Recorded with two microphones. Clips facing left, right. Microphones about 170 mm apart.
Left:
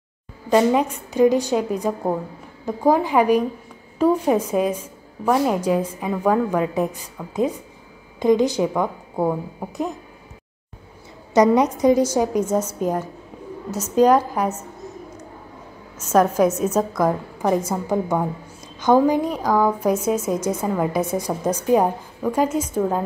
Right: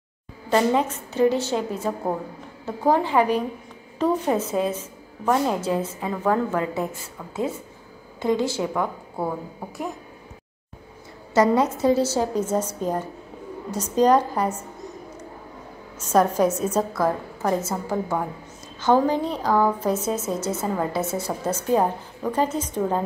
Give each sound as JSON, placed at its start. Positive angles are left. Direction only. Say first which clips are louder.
{"t": 0.5, "sound": "a woman's voice", "louder": "left 3 dB", "side_deg": 15}
{"t": 11.3, "sound": "a woman's voice", "louder": "left 3 dB", "side_deg": 20}
{"t": 16.1, "sound": "a woman's voice", "louder": "left 2 dB", "side_deg": 10}